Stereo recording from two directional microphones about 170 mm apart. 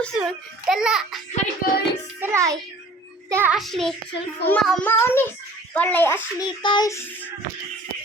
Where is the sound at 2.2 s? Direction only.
15° right (ahead or behind).